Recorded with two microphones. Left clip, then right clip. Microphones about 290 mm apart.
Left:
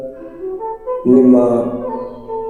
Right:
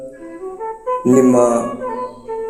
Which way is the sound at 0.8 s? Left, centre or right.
Right.